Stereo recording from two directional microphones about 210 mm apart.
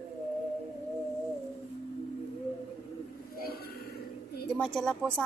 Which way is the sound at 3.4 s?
45° left (ahead or behind).